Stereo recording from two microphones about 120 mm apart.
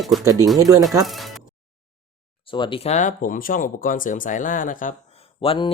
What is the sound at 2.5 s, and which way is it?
Speech, 40° left (ahead or behind).